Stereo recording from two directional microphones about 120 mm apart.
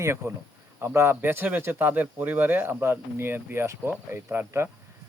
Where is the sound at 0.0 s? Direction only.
20° right (ahead or behind).